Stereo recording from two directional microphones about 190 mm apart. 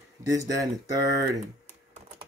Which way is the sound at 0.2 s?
15° right (ahead or behind).